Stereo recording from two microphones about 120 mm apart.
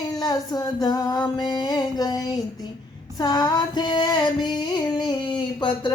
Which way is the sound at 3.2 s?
35° left (ahead or behind).